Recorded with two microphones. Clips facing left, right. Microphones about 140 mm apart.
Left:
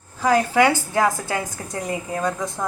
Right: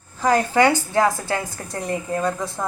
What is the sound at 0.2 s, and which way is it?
Speech, 5° left (ahead or behind).